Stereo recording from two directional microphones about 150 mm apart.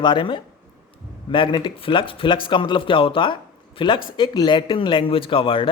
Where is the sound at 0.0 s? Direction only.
35° left (ahead or behind).